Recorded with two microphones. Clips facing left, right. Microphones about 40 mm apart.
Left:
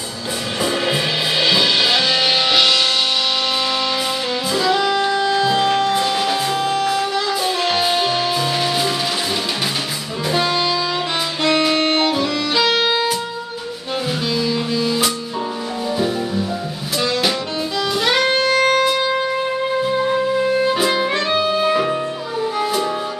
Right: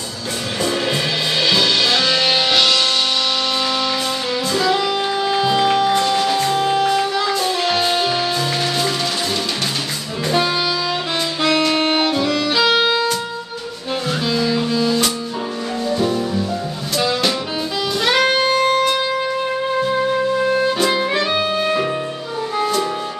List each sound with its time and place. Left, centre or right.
0.6 s music: centre
4.5 s music: centre
11.4 s music: centre
14.3 s music: centre
18.0 s music: centre